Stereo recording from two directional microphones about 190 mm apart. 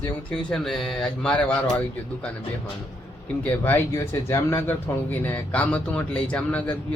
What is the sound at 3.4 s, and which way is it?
Speech, 10° left (ahead or behind).